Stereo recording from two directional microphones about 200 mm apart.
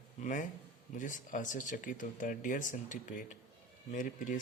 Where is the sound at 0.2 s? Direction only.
40° left (ahead or behind).